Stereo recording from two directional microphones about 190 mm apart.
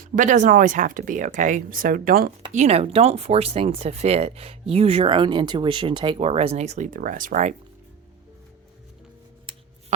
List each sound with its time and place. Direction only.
0.0 s speech: 40° right (ahead or behind)
2.5 s speech: 35° right (ahead or behind)